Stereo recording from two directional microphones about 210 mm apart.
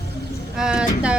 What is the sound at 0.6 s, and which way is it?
Speech, 5° right (ahead or behind).